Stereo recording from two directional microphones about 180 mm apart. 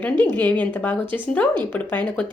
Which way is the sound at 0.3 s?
10° left (ahead or behind).